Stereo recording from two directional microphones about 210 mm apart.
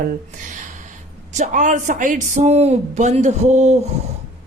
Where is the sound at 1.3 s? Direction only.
35° right (ahead or behind).